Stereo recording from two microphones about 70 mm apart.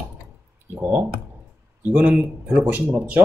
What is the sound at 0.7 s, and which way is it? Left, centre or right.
A man's voice, right.